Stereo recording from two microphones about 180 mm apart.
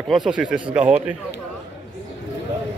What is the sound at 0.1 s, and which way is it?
Speech, 5° right (ahead or behind).